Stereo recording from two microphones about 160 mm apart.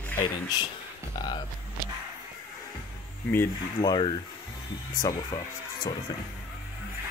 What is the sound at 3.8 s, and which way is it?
Speech, 25° left (ahead or behind).